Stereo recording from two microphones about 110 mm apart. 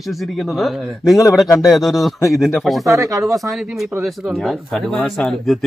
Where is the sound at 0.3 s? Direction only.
Centre (ahead or behind).